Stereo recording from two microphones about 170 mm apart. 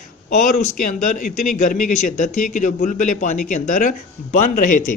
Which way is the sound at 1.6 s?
50° left (ahead or behind).